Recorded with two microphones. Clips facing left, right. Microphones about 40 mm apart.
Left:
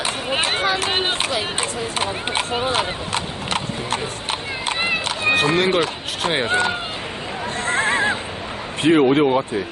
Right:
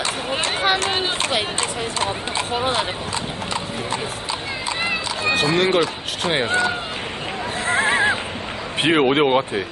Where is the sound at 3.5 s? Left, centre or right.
Left.